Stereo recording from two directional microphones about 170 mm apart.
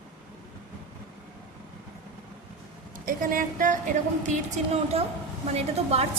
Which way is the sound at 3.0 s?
55° right (ahead or behind).